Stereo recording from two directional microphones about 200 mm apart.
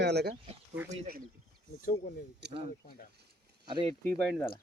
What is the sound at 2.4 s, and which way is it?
Speech, 55° right (ahead or behind).